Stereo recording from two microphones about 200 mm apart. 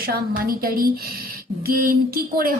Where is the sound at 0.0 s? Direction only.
45° right (ahead or behind).